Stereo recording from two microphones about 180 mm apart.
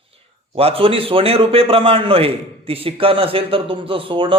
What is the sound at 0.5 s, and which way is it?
A man's voice, 30° right (ahead or behind).